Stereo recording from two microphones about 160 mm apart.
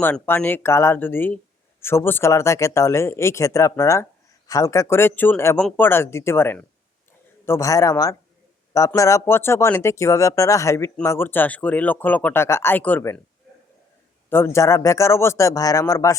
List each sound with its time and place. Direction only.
0.0 s speech: 10° left (ahead or behind)
14.3 s speech: 15° left (ahead or behind)